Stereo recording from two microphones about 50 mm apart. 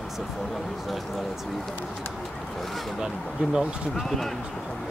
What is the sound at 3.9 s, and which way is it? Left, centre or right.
Speech, centre.